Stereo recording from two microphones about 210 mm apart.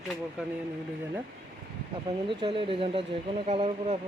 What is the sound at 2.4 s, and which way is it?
Speech, 25° right (ahead or behind).